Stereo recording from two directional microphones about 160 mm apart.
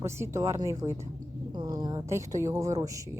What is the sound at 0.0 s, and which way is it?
Speech, 15° right (ahead or behind).